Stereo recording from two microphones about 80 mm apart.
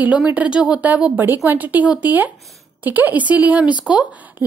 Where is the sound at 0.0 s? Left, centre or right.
Centre.